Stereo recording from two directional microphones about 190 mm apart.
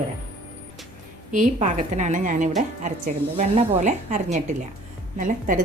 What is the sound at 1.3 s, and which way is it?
A woman's voice, 40° right (ahead or behind).